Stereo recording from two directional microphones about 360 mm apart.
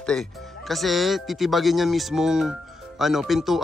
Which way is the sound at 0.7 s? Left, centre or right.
Centre.